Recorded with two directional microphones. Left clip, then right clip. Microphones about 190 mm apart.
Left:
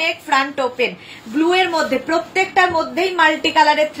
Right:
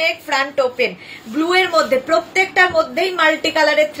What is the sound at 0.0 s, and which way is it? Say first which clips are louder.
A woman's voice: left 1 dB; 15° right (ahead or behind).